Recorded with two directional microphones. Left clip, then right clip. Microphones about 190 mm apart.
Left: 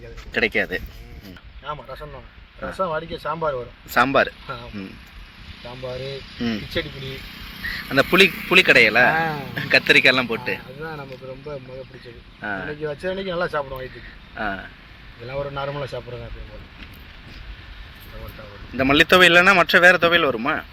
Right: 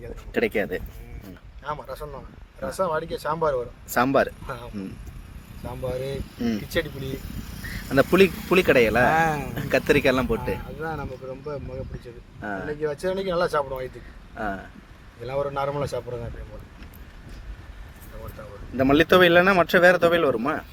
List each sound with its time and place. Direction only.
0.3 s speech: 10° right (ahead or behind)
1.6 s speech: 25° right (ahead or behind)
3.9 s speech: 15° right (ahead or behind)
7.9 s speech: 10° right (ahead or behind)
13.6 s speech: 25° right (ahead or behind)
14.3 s speech: 15° right (ahead or behind)
18.8 s speech: 15° right (ahead or behind)